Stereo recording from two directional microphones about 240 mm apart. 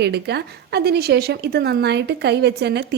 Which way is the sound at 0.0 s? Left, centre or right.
Right.